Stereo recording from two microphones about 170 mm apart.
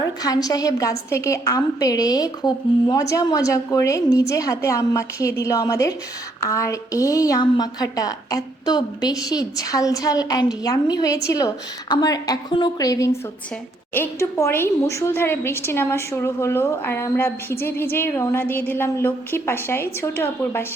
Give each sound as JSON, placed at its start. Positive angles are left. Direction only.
{"t": 0.2, "sound": "a woman's voice", "side_deg": 20}